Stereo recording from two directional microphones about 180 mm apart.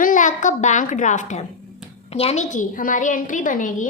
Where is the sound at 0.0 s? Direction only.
45° left (ahead or behind).